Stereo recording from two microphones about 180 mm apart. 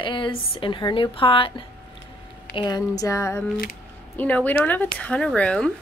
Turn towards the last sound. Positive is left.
turn(degrees=5)  # may be behind; listen again after turning